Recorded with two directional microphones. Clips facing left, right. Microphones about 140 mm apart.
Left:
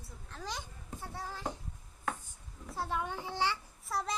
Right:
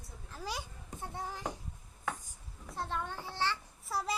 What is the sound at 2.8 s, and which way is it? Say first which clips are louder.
Speech: left 2 dB; 10° left (ahead or behind).